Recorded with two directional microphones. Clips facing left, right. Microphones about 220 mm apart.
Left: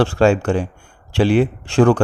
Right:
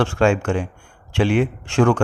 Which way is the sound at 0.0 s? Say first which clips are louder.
Left 3 dB; 35° left (ahead or behind).